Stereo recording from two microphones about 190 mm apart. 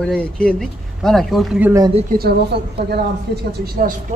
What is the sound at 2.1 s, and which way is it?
Speech, 55° right (ahead or behind).